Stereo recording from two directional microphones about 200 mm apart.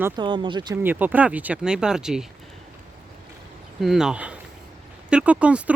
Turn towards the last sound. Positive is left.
turn(degrees=-5)  # may be behind; listen again after turning